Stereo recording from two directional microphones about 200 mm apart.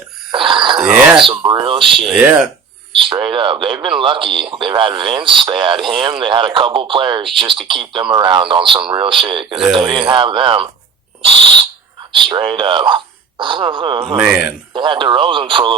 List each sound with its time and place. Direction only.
0.3 s wheeze: 25° right (ahead or behind)
1.1 s a sound: 25° right (ahead or behind)
2.0 s speech: 5° right (ahead or behind)
3.0 s speech: 25° right (ahead or behind)
11.2 s owl: 25° right (ahead or behind)
12.1 s speech: 25° right (ahead or behind)
14.2 s speech: 10° right (ahead or behind)
14.7 s speech: 25° right (ahead or behind)